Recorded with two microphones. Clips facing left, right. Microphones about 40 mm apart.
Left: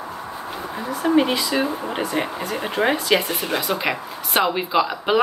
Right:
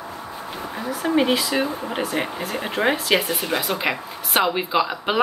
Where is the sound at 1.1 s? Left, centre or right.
Centre.